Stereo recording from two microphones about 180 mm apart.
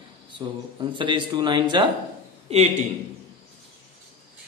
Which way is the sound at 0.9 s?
25° right (ahead or behind).